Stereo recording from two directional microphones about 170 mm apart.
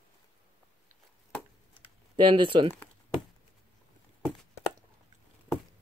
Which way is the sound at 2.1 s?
30° right (ahead or behind).